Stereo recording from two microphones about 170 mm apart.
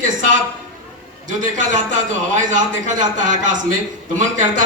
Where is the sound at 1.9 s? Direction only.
45° right (ahead or behind).